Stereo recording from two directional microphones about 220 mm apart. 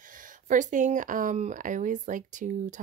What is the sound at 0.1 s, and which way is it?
Speech, 35° right (ahead or behind).